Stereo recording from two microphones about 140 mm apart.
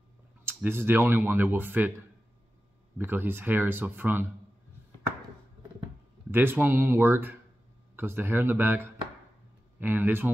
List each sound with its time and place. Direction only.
0.5 s speech: 15° right (ahead or behind)
3.0 s speech: 15° right (ahead or behind)
6.3 s speech: 15° right (ahead or behind)